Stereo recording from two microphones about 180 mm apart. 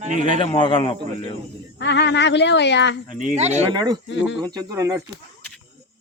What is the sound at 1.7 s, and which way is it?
Speech, 75° left (ahead or behind).